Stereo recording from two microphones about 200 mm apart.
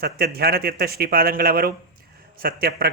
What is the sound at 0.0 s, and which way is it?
A man's voice, 50° right (ahead or behind).